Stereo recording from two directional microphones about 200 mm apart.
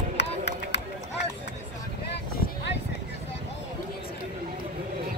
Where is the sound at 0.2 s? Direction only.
60° left (ahead or behind).